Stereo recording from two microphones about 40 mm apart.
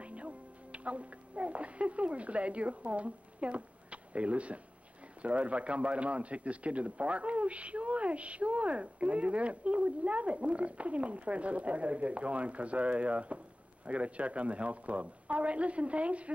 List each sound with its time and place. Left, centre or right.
0.0 s a man's voice: right